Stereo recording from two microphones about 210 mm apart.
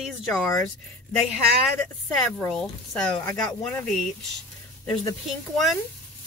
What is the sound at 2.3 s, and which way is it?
Speech, 5° left (ahead or behind).